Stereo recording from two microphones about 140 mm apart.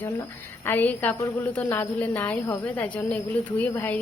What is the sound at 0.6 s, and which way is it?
A woman's voice, 15° left (ahead or behind).